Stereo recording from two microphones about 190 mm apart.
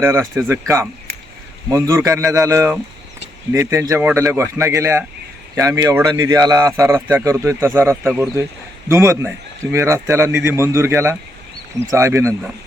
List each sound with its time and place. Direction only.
0.0 s a man's voice: 10° right (ahead or behind)
1.7 s a man's voice: 15° right (ahead or behind)